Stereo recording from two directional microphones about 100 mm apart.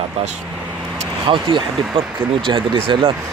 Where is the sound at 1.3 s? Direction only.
55° right (ahead or behind).